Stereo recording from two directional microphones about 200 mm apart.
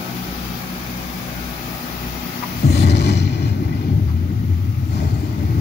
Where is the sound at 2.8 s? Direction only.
55° left (ahead or behind).